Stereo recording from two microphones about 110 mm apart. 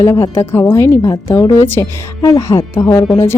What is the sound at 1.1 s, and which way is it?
Speech, 35° left (ahead or behind).